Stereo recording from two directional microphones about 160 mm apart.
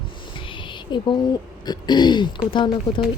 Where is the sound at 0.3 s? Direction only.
30° left (ahead or behind).